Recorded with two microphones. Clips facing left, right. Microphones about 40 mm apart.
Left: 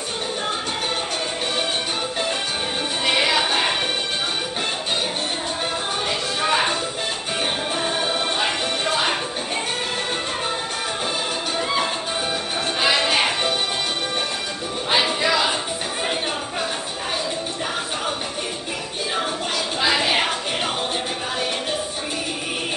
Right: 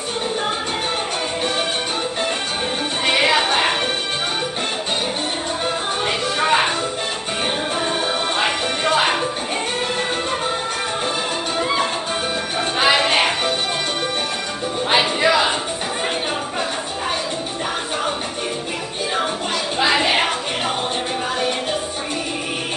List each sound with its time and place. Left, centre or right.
3.1 s music: centre
6.0 s music: centre
8.4 s music: right
11.5 s music: centre
12.7 s music: right
14.9 s music: centre
19.8 s music: centre